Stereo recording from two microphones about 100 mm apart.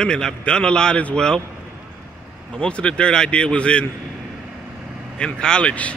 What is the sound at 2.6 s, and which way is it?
Speech, 10° left (ahead or behind).